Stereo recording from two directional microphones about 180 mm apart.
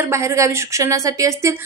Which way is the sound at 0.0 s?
15° right (ahead or behind).